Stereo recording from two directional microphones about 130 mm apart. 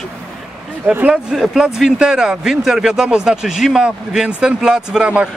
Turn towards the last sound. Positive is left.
turn(degrees=-10)  # may be behind; listen again after turning